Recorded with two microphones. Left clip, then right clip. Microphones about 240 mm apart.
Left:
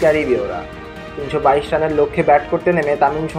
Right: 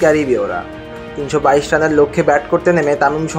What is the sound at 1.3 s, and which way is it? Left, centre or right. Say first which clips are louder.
Speech: right 2 dB; right.